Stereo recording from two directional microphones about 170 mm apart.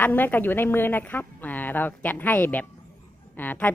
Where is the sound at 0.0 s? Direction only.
10° left (ahead or behind).